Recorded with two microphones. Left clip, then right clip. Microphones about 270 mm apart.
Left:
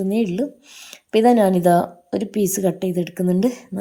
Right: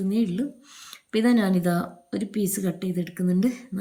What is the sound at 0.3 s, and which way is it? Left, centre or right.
Speech, centre.